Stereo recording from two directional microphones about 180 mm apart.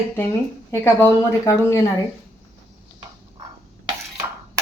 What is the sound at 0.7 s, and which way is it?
Speech, 15° left (ahead or behind).